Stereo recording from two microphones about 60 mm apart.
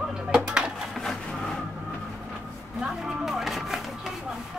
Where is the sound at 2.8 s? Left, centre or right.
Centre.